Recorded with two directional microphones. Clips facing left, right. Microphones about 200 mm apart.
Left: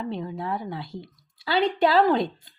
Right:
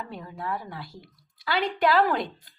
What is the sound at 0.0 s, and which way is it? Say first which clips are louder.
Speech: left 6 dB; 25° left (ahead or behind).